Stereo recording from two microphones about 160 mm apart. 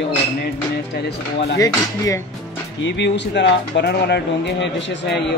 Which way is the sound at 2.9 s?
90° left.